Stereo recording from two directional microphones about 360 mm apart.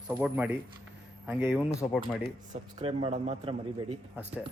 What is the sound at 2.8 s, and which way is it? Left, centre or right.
Speech, centre.